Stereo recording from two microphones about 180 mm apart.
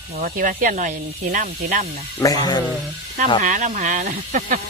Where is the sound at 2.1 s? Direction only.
20° left (ahead or behind).